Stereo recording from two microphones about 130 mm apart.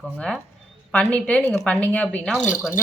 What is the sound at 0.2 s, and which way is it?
Speech, 5° left (ahead or behind).